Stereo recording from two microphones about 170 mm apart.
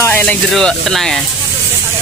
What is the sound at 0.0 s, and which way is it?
Speech, 10° left (ahead or behind).